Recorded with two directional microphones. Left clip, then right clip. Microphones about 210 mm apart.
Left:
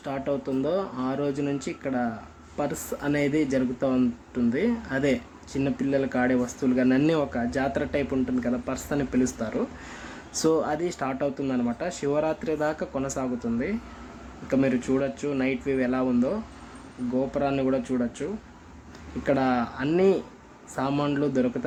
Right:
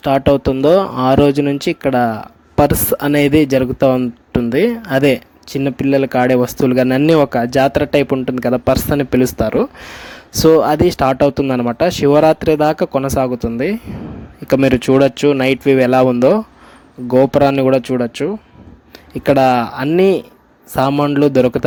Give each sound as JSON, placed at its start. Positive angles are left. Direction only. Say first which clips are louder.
{"t": 0.0, "sound": "speech", "louder": "right 17 dB", "side_deg": -45}
{"t": 20.9, "sound": "a man's voice", "louder": "right 11 dB", "side_deg": -30}
{"t": 21.2, "sound": "speech", "louder": "right 14 dB", "side_deg": -45}